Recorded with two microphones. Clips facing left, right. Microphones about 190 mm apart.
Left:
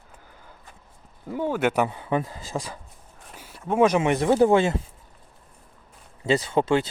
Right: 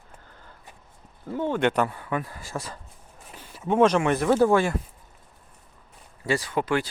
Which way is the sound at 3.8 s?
15° left (ahead or behind).